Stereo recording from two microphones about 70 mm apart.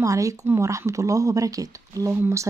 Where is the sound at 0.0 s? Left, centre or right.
Right.